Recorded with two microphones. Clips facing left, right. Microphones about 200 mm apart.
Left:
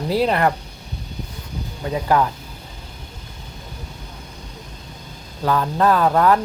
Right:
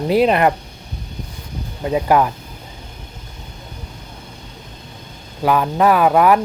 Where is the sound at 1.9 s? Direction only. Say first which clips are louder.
Right 3 dB; 20° right (ahead or behind).